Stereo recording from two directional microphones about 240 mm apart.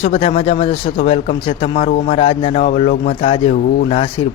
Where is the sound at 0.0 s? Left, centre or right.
Left.